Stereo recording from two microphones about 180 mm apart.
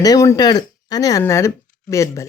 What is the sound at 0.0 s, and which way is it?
Speech, 20° left (ahead or behind).